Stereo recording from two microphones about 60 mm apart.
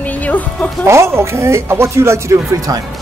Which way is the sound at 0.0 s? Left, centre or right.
Left.